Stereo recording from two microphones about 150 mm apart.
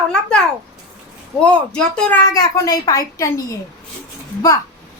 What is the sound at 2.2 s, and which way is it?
A child's voice, 20° left (ahead or behind).